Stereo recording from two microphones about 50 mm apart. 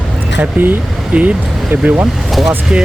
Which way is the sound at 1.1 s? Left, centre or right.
Right.